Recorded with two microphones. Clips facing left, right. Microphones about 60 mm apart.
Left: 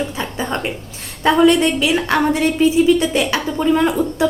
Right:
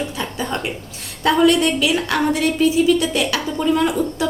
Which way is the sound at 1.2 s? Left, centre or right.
Left.